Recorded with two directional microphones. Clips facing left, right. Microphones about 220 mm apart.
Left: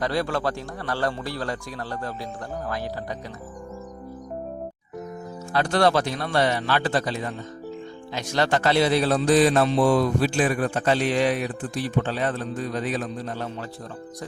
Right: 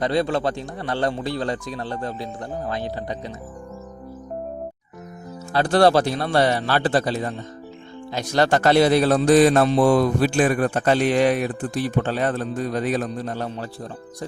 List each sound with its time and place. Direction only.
0.0 s speech: 20° right (ahead or behind)
5.5 s a man's voice: 30° right (ahead or behind)